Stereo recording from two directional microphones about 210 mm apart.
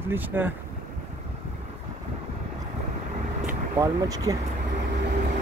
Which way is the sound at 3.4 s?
15° right (ahead or behind).